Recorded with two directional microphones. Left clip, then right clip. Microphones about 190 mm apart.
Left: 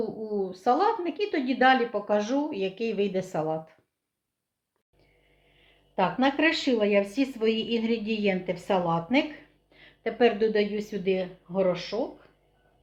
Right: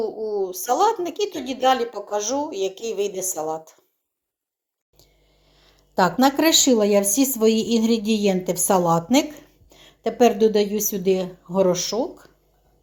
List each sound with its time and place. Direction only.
0.3 s speech: 40° right (ahead or behind)
6.2 s a woman's voice: 45° right (ahead or behind)